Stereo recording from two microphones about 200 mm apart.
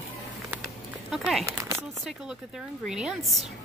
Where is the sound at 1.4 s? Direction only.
15° right (ahead or behind).